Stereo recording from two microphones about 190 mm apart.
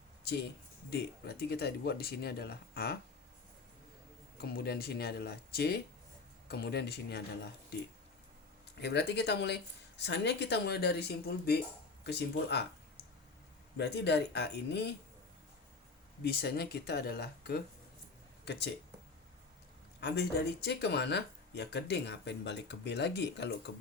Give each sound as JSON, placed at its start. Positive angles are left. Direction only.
{"t": 0.9, "sound": "speech", "side_deg": 55}
{"t": 4.4, "sound": "speech", "side_deg": 55}
{"t": 8.8, "sound": "speech", "side_deg": 65}
{"t": 13.7, "sound": "speech", "side_deg": 65}
{"t": 16.2, "sound": "speech", "side_deg": 55}
{"t": 20.0, "sound": "speech", "side_deg": 60}